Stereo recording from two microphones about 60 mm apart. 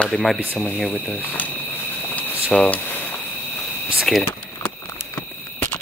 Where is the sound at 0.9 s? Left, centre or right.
Left.